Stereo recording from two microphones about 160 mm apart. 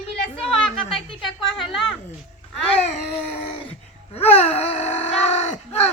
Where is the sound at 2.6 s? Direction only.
40° left (ahead or behind).